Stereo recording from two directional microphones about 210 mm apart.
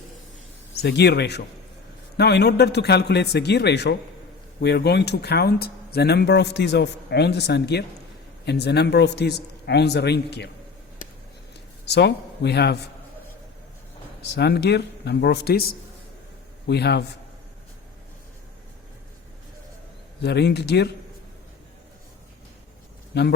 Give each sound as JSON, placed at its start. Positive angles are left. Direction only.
{"t": 0.8, "sound": "speech", "side_deg": 50}
{"t": 11.9, "sound": "speech", "side_deg": 55}
{"t": 14.3, "sound": "speech", "side_deg": 50}
{"t": 20.2, "sound": "speech", "side_deg": 50}
{"t": 23.1, "sound": "speech", "side_deg": 50}